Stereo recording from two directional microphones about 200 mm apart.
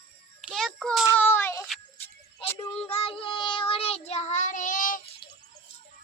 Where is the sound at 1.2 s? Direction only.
10° left (ahead or behind).